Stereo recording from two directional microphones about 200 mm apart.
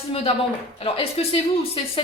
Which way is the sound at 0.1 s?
30° left (ahead or behind).